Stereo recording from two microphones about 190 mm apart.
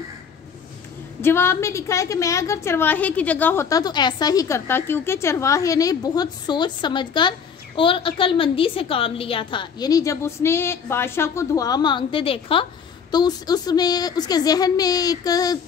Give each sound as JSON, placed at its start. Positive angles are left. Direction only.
{"t": 1.2, "sound": "a woman's voice", "side_deg": 10}